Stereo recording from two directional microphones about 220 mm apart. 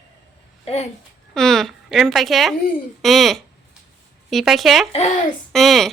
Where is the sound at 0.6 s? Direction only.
30° left (ahead or behind).